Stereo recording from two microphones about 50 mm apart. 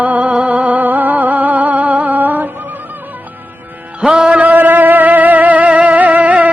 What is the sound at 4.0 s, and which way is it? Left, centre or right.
Music, centre.